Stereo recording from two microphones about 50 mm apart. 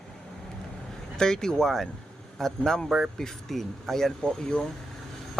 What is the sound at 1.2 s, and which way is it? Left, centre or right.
Speech, centre.